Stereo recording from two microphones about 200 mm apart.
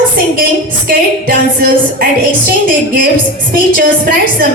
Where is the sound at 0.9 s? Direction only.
50° right (ahead or behind).